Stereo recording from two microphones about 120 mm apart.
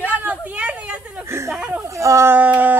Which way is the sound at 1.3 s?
20° right (ahead or behind).